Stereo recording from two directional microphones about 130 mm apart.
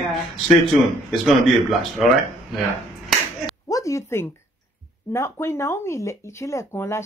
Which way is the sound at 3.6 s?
25° left (ahead or behind).